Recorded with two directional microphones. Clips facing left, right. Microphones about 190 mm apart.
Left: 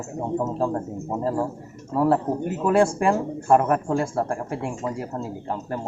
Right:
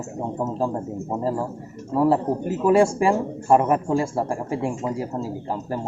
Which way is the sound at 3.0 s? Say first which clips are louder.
Right 1 dB; 10° right (ahead or behind).